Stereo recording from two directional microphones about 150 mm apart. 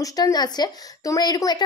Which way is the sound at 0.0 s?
25° left (ahead or behind).